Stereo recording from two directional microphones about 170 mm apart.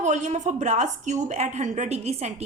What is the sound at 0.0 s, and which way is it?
A woman's voice, 45° right (ahead or behind).